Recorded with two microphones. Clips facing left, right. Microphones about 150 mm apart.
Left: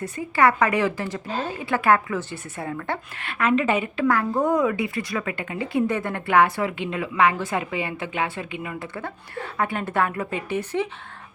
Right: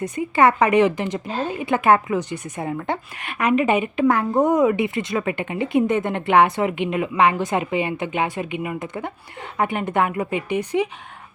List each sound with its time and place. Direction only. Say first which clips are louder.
0.0 s a woman's voice: right 3 dB; 20° right (ahead or behind)